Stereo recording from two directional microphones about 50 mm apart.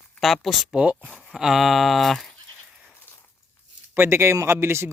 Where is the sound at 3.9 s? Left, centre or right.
Right.